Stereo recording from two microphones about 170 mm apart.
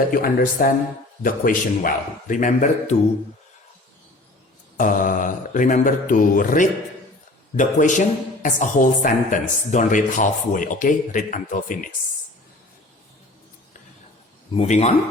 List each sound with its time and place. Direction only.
0.1 s speech: 55° left (ahead or behind)
4.8 s speech: 50° left (ahead or behind)
14.5 s speech: 40° left (ahead or behind)